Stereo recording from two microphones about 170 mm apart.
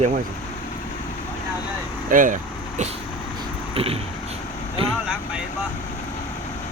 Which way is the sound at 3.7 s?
35° right (ahead or behind).